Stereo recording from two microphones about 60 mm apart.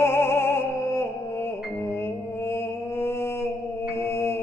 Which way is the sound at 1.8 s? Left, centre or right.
Left.